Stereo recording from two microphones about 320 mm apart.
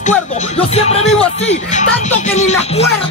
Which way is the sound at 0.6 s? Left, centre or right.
Centre.